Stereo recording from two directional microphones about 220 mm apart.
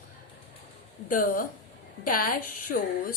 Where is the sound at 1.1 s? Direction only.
40° left (ahead or behind).